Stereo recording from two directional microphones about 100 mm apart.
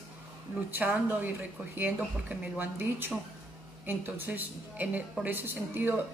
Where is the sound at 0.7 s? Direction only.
20° right (ahead or behind).